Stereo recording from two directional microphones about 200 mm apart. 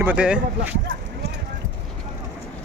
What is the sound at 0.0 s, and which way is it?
Speech, 5° right (ahead or behind).